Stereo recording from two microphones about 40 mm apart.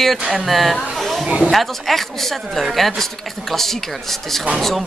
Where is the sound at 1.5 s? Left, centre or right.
Centre.